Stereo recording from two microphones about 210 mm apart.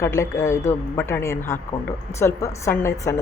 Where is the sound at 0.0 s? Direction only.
15° left (ahead or behind).